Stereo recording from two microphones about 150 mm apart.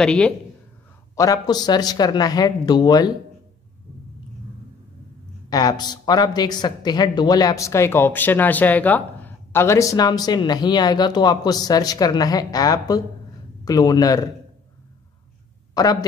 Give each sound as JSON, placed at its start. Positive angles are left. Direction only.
{"t": 0.0, "sound": "a man's voice", "side_deg": 5}
{"t": 1.1, "sound": "speech", "side_deg": 20}
{"t": 5.5, "sound": "speech", "side_deg": 25}
{"t": 15.7, "sound": "speech", "side_deg": 25}